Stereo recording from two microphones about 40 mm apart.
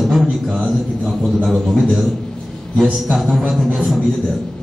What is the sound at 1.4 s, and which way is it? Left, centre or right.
Speech, centre.